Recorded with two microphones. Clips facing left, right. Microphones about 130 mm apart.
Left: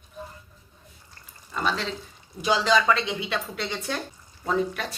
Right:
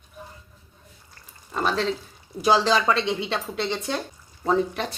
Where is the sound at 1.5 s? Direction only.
40° right (ahead or behind).